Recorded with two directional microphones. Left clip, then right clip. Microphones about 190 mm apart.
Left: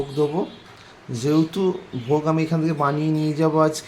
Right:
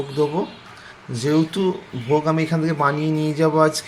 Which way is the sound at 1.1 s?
15° left (ahead or behind).